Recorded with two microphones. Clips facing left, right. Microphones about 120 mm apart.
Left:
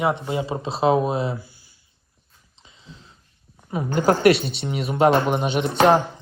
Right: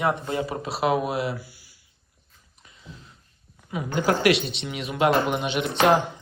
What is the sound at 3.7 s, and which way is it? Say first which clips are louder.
A woman's voice: left 4 dB; 35° left (ahead or behind).